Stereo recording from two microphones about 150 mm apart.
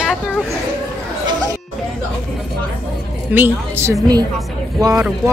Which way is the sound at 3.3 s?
15° right (ahead or behind).